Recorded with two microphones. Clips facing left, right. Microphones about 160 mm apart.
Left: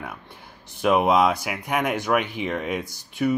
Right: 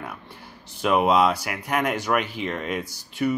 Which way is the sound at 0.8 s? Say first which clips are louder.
Left 1 dB; 5° left (ahead or behind).